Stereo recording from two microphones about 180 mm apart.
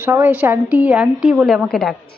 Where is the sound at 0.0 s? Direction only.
10° right (ahead or behind).